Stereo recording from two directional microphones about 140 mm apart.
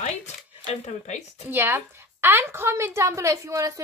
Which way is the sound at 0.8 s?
55° left (ahead or behind).